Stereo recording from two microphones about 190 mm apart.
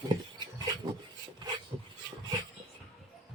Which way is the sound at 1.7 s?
25° right (ahead or behind).